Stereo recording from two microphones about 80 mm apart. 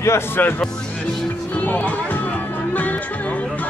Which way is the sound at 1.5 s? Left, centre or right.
Centre.